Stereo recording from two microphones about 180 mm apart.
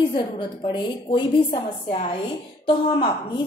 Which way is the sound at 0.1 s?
25° left (ahead or behind).